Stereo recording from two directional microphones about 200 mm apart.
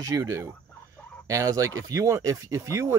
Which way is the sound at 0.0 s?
15° right (ahead or behind).